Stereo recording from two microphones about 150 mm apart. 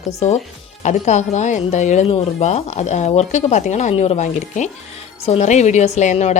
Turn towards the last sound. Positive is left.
turn(degrees=50)  # may be behind; listen again after turning